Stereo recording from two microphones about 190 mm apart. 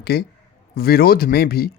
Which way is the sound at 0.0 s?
55° left (ahead or behind).